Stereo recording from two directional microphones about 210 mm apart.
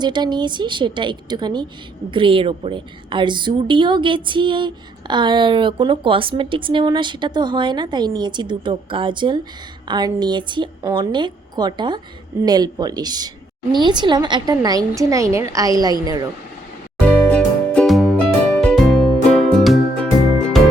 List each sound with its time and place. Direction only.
0.0 s a woman's voice: 20° right (ahead or behind)
17.2 s music: 5° left (ahead or behind)